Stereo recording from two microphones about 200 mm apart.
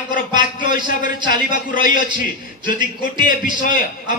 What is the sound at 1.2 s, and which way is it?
Speech, 45° left (ahead or behind).